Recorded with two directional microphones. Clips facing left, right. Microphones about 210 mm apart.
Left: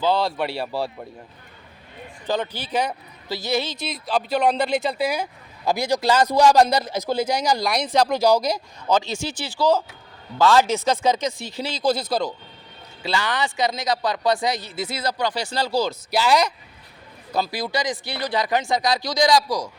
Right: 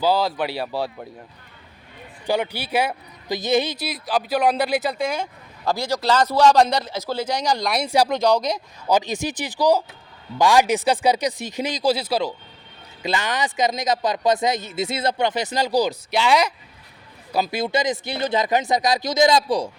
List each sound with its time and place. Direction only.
0.0 s speech: 5° right (ahead or behind)
2.2 s speech: 10° right (ahead or behind)
4.9 s a man's voice: 5° left (ahead or behind)
6.8 s a man's voice: 15° left (ahead or behind)
8.9 s speech: 15° right (ahead or behind)
13.0 s speech: 20° right (ahead or behind)
16.1 s speech: centre (ahead or behind)
17.3 s speech: 20° right (ahead or behind)